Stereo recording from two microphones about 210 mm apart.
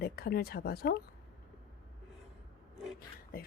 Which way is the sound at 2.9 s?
45° left (ahead or behind).